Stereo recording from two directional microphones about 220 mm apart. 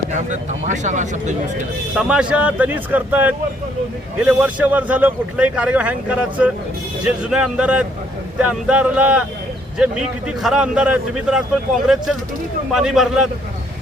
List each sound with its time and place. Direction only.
0.1 s speech: 35° right (ahead or behind)
2.0 s a man's voice: 5° right (ahead or behind)
12.7 s a man's voice: centre (ahead or behind)